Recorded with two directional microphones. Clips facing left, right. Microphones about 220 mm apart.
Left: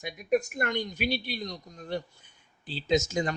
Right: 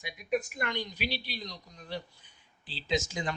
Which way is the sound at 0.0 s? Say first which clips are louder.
Left 5 dB; 45° left (ahead or behind).